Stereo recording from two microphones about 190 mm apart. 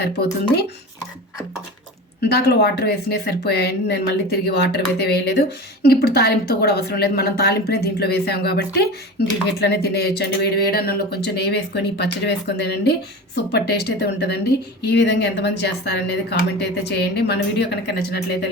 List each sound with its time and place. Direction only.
2.2 s speech: 60° left (ahead or behind)